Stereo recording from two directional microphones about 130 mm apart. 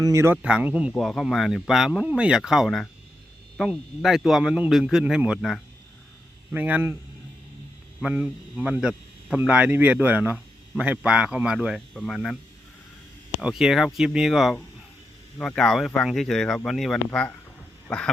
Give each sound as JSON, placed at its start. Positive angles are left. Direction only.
{"t": 0.0, "sound": "speech", "side_deg": -25}
{"t": 0.4, "sound": "a man's voice", "side_deg": -10}
{"t": 0.9, "sound": "a man's voice", "side_deg": 0}
{"t": 8.0, "sound": "a man's voice", "side_deg": -10}
{"t": 13.4, "sound": "speech", "side_deg": -5}
{"t": 17.8, "sound": "a sound", "side_deg": 5}